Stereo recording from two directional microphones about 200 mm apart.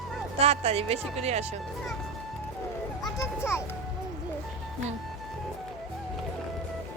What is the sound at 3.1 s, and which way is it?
Children playing, 15° left (ahead or behind).